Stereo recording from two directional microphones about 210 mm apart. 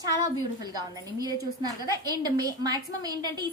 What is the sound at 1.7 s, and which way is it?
A woman's voice, 20° right (ahead or behind).